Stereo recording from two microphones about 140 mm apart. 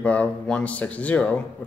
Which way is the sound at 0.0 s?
10° left (ahead or behind).